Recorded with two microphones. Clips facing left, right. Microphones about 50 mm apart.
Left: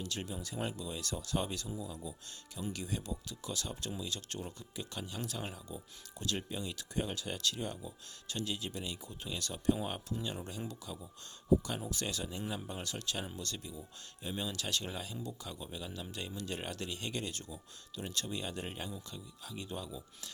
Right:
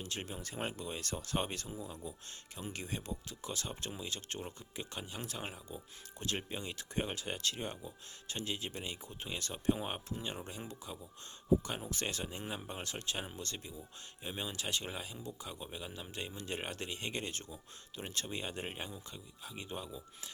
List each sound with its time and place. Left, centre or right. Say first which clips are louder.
0.0 s speech: left 2 dB; right